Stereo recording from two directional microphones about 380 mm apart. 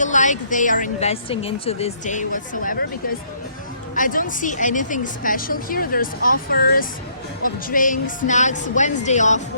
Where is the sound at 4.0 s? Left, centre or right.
Left.